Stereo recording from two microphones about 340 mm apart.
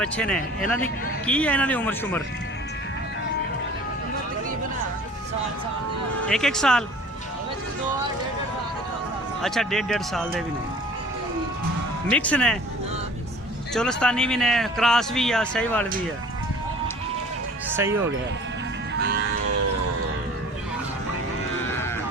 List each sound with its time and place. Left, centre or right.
0.0 s a man's voice: centre
6.2 s a man's voice: centre
9.4 s a man's voice: centre
12.0 s a man's voice: centre
13.7 s a man's voice: centre
17.7 s speech: centre
18.9 s music: right